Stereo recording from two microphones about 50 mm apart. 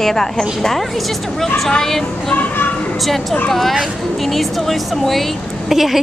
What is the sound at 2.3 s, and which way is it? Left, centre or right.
Speech, left.